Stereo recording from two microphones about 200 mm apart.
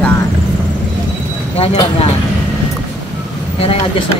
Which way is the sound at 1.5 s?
30° left (ahead or behind).